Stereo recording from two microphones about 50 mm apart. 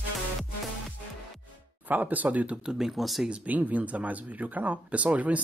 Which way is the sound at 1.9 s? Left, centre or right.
Right.